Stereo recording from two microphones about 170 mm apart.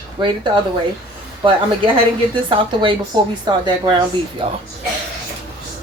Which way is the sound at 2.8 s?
25° right (ahead or behind).